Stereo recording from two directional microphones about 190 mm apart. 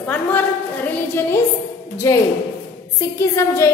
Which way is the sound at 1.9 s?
15° left (ahead or behind).